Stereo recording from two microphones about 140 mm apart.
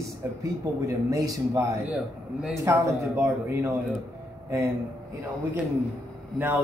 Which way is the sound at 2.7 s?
20° right (ahead or behind).